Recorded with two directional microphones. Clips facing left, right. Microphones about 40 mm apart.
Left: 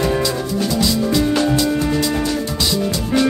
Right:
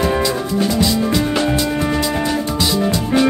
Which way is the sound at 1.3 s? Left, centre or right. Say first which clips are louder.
Left 1 dB; right.